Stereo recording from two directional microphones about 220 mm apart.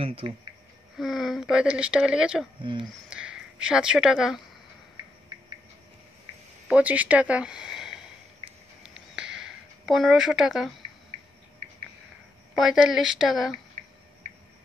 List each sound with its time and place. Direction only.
0.0 s speech: 25° right (ahead or behind)
0.9 s speech: centre (ahead or behind)
6.7 s speech: 5° right (ahead or behind)
8.9 s a sound: 5° right (ahead or behind)
12.5 s speech: centre (ahead or behind)